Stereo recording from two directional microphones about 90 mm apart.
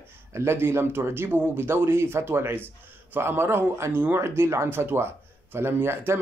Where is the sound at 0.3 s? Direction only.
30° right (ahead or behind).